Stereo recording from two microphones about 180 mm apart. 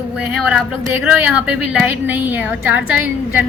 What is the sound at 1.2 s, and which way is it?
A woman's voice, 5° right (ahead or behind).